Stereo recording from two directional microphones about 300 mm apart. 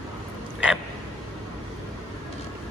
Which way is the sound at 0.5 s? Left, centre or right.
Centre.